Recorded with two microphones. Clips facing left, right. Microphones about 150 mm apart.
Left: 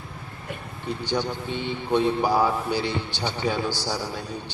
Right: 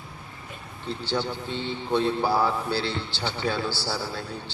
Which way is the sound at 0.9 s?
15° left (ahead or behind).